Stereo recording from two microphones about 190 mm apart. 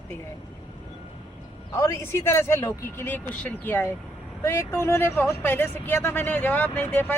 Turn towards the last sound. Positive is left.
turn(degrees=10)  # may be behind; listen again after turning